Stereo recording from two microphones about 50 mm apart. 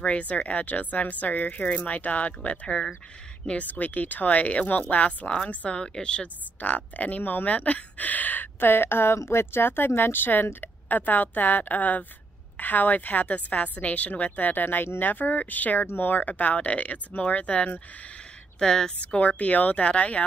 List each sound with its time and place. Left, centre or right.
0.0 s speech: left
6.6 s speech: left
18.6 s a woman's voice: centre
18.9 s speech: left